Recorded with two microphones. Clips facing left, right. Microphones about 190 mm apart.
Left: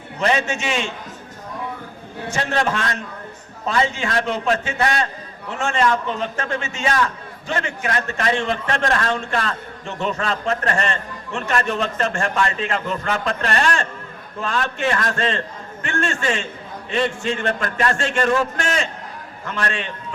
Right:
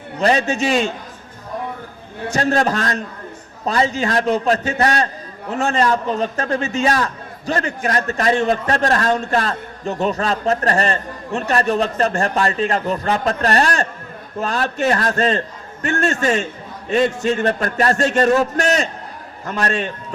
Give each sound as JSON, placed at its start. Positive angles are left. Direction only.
{"t": 0.2, "sound": "a man's voice", "side_deg": -35}
{"t": 2.3, "sound": "a man's voice", "side_deg": -40}